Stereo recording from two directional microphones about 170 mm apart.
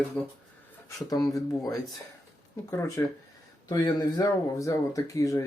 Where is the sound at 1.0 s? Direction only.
20° left (ahead or behind).